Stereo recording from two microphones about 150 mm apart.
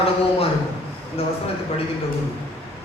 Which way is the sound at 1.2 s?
40° left (ahead or behind).